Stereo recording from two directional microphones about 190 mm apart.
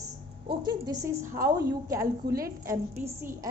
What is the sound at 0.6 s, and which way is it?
A woman's voice, 20° right (ahead or behind).